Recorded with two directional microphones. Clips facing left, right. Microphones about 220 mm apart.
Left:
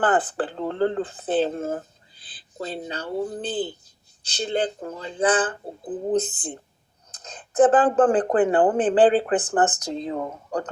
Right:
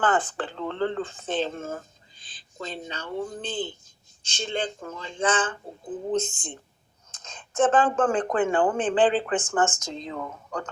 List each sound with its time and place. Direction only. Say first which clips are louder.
0.0 s speech: left 3 dB; 35° left (ahead or behind)